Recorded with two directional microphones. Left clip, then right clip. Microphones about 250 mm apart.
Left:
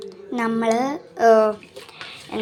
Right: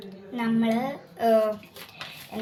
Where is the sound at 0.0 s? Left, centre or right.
Left.